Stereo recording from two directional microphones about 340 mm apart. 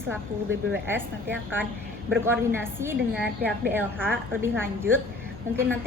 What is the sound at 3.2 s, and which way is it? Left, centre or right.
Speech, right.